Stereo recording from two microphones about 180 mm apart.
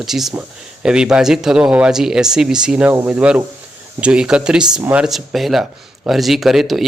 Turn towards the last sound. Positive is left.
turn(degrees=0)  # may be behind; listen again after turning